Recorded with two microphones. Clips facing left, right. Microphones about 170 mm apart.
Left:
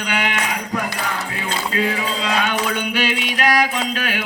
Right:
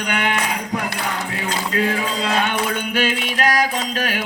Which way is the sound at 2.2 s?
50° right (ahead or behind).